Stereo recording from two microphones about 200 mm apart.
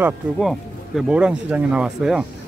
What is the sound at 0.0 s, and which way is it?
Speech, centre (ahead or behind).